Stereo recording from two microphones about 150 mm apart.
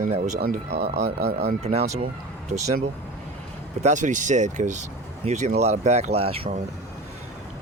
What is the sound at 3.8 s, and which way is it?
Speech, 55° right (ahead or behind).